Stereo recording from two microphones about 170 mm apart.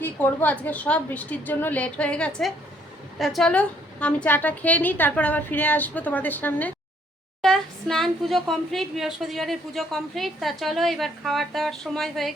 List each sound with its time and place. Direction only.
0.0 s a woman's voice: 10° left (ahead or behind)